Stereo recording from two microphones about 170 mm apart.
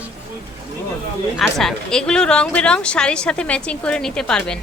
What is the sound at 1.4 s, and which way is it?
A woman's voice, centre (ahead or behind).